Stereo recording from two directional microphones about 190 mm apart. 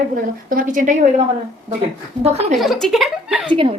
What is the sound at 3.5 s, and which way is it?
Speech, 30° right (ahead or behind).